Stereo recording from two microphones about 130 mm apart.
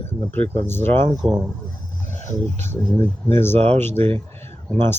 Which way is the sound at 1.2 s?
35° right (ahead or behind).